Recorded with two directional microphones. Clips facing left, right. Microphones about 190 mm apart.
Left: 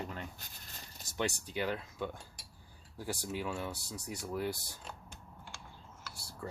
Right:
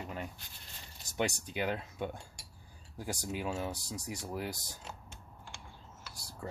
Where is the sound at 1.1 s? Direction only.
20° right (ahead or behind).